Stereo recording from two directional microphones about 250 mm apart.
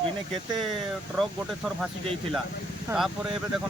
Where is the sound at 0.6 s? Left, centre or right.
Centre.